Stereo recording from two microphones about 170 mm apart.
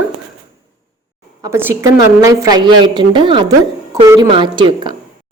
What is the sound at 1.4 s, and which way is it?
A woman's voice, 15° right (ahead or behind).